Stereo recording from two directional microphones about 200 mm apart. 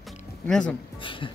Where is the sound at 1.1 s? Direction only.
25° left (ahead or behind).